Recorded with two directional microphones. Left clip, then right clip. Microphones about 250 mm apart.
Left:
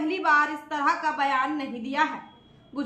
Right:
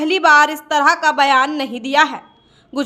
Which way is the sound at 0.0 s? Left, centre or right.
Right.